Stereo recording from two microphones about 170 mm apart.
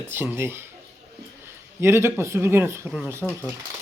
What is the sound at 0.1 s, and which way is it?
Speech, 15° right (ahead or behind).